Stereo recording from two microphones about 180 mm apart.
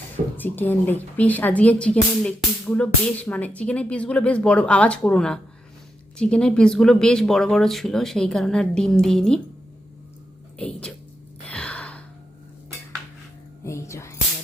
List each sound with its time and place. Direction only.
0.3 s a woman's voice: 10° left (ahead or behind)
10.6 s a woman's voice: 5° left (ahead or behind)
11.4 s gasp: 5° left (ahead or behind)
13.7 s whispering: 15° left (ahead or behind)